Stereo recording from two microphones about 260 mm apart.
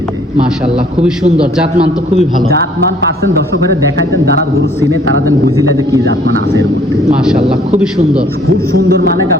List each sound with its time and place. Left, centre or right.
8.7 s a man's voice: right